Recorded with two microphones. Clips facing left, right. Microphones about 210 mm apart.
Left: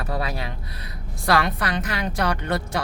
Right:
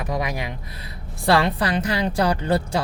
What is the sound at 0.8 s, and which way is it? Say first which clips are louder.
A woman's voice: right 4 dB; 25° right (ahead or behind).